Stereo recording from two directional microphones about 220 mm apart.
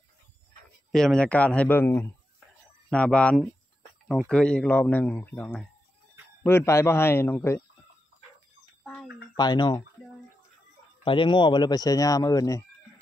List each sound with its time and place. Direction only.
0.9 s speech: 5° left (ahead or behind)
8.8 s a sound: 5° left (ahead or behind)
9.4 s speech: 20° left (ahead or behind)
11.1 s speech: 20° left (ahead or behind)